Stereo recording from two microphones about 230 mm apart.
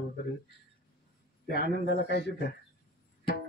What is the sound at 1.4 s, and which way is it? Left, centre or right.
Speech, left.